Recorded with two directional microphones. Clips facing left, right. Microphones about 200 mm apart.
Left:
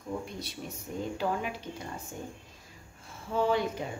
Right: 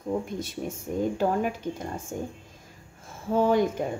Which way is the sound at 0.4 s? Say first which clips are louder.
Right 7 dB; 50° right (ahead or behind).